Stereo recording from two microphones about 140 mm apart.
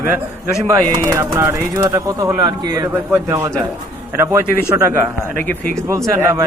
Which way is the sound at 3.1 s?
20° right (ahead or behind).